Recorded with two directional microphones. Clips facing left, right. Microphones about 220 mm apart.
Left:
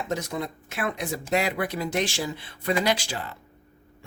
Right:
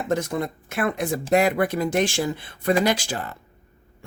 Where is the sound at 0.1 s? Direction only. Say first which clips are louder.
Right 7 dB; 55° right (ahead or behind).